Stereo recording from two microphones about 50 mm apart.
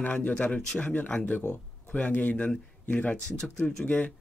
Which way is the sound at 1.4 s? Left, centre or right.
Left.